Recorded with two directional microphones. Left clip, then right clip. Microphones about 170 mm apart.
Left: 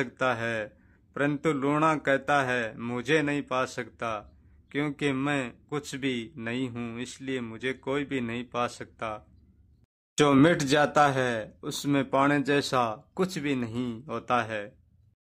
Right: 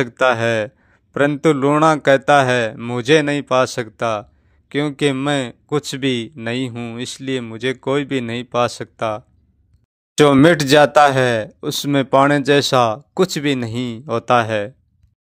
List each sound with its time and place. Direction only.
0.0 s speech: 40° right (ahead or behind)
6.7 s speech: 20° right (ahead or behind)
7.0 s speech: 30° right (ahead or behind)